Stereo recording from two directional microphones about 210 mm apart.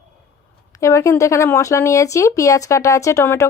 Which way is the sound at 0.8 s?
15° left (ahead or behind).